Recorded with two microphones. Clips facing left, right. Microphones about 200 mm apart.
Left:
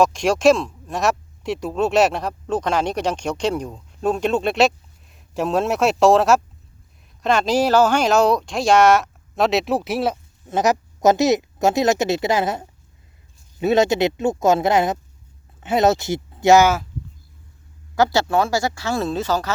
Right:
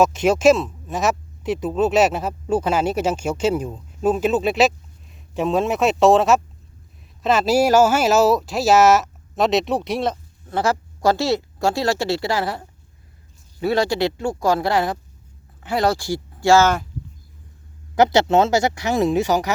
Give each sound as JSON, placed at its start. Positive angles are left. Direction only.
{"t": 0.0, "sound": "speech", "side_deg": -5}
{"t": 10.5, "sound": "speech", "side_deg": 20}
{"t": 17.9, "sound": "speech", "side_deg": -20}